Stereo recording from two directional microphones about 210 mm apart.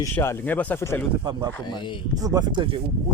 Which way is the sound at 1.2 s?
20° right (ahead or behind).